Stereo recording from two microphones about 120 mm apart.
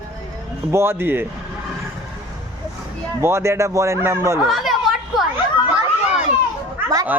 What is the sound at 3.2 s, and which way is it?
Speech, 20° right (ahead or behind).